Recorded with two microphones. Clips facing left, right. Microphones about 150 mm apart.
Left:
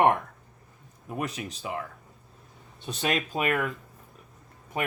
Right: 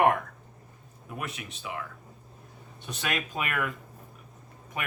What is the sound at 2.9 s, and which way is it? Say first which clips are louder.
Speech: left 4 dB; 30° left (ahead or behind).